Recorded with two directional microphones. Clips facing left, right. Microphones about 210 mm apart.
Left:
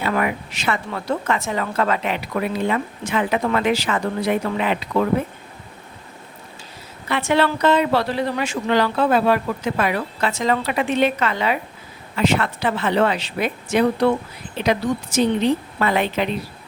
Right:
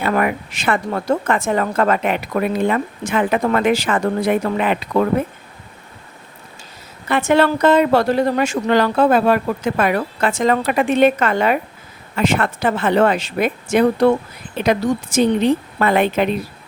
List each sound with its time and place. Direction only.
0.0 s speech: 50° right (ahead or behind)
7.1 s speech: 45° right (ahead or behind)